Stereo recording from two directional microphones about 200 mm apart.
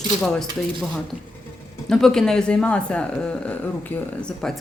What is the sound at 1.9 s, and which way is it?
Speech, centre (ahead or behind).